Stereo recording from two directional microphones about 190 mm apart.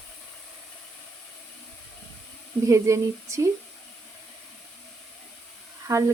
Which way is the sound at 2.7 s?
15° right (ahead or behind).